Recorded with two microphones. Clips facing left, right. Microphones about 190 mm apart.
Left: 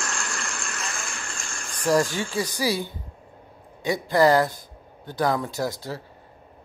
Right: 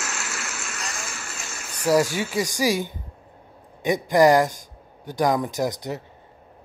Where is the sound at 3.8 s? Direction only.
20° right (ahead or behind).